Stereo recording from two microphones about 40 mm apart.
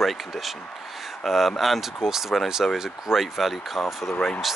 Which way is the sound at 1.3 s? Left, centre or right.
Centre.